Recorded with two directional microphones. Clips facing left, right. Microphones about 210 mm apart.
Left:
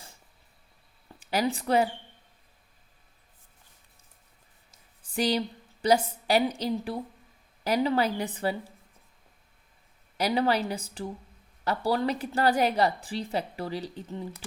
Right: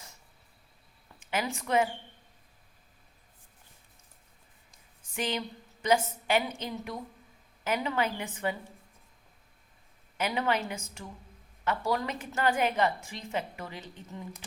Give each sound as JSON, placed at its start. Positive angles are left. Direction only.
{"t": 1.0, "sound": "a woman's voice", "side_deg": 35}
{"t": 5.1, "sound": "a woman's voice", "side_deg": 35}
{"t": 10.2, "sound": "a woman's voice", "side_deg": 35}